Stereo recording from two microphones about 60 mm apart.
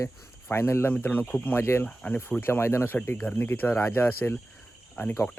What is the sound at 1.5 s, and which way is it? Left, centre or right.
Speech, left.